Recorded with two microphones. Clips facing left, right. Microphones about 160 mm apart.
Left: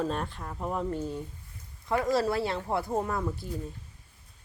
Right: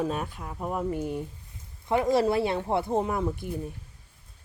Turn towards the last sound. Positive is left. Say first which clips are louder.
# right 3 dB
turn(degrees=-20)  # may be behind; listen again after turning